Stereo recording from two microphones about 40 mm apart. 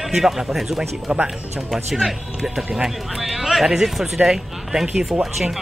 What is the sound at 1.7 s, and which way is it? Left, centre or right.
Speech, centre.